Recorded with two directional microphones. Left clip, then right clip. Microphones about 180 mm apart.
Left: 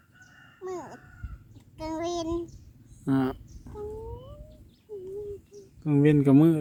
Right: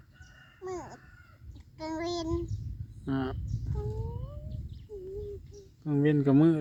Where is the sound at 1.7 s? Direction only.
Centre (ahead or behind).